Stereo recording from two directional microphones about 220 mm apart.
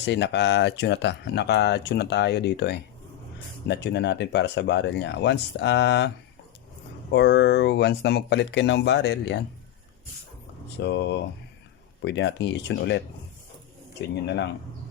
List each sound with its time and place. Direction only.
0.0 s speech: 50° left (ahead or behind)
7.1 s speech: 50° left (ahead or behind)
10.7 s speech: 50° left (ahead or behind)